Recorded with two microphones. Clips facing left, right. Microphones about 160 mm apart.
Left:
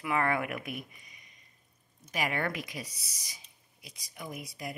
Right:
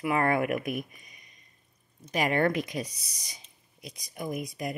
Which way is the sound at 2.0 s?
45° right (ahead or behind).